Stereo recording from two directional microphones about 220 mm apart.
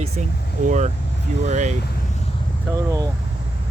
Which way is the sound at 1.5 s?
35° right (ahead or behind).